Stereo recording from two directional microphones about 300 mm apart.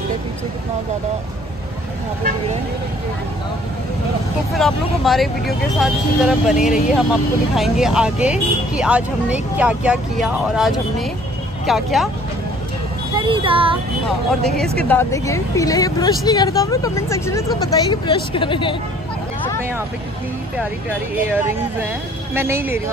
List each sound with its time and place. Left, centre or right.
4.6 s speech: centre
13.1 s speech: centre
14.9 s a woman's voice: centre
21.2 s speech: centre